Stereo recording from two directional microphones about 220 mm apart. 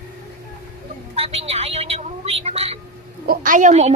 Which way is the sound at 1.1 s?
25° right (ahead or behind).